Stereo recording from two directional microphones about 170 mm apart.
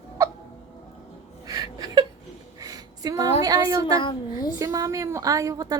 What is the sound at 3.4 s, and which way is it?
Child singing, 20° right (ahead or behind).